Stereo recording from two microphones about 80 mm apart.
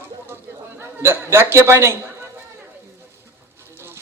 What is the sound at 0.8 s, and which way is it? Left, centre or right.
Speech, right.